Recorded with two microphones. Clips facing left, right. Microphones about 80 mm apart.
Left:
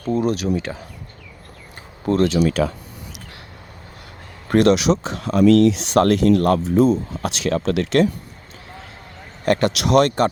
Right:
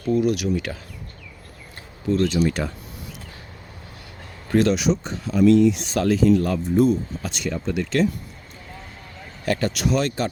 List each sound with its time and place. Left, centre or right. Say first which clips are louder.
0.1 s speech: left 1 dB; left
2.2 s speech: left 4 dB; left
4.4 s speech: left 4 dB; left
6.0 s speech: left 3 dB; left
9.4 s speech: left 5 dB; left